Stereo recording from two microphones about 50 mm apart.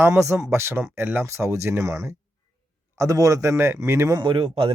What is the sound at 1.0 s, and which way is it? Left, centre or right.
Speech, right.